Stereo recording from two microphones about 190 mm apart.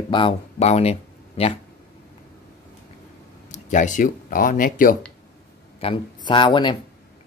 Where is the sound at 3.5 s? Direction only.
40° left (ahead or behind).